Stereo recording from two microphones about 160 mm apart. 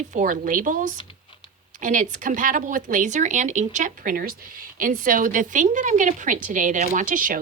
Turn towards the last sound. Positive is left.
turn(degrees=-60)  # may be behind; listen again after turning